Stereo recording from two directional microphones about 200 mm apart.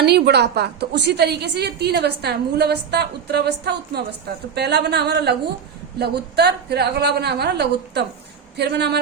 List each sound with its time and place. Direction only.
0.0 s a woman's voice: 55° right (ahead or behind)